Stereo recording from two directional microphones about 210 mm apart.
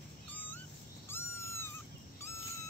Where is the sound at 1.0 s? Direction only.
10° left (ahead or behind).